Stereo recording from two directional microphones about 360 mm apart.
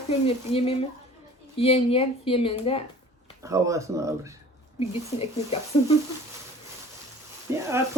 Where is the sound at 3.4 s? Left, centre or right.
Centre.